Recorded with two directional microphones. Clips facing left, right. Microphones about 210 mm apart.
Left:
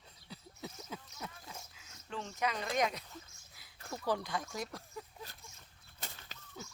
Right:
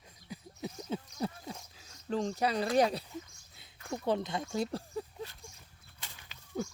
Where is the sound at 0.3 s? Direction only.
15° right (ahead or behind).